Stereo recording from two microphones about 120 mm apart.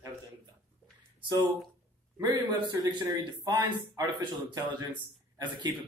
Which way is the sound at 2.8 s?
30° right (ahead or behind).